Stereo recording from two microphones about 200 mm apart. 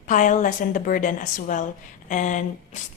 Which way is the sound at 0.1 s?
40° left (ahead or behind).